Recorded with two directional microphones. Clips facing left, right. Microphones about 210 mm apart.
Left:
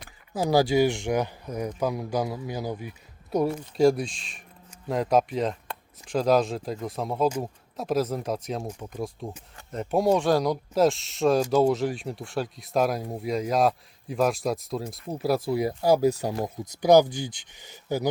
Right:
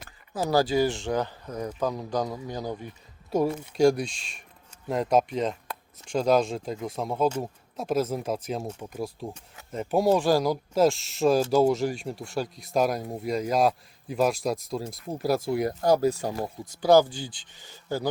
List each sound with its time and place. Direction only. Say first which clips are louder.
0.3 s speech: left 2 dB; 15° left (ahead or behind)
3.3 s speech: even; 5° right (ahead or behind); by 18.1 s 15° left (ahead or behind)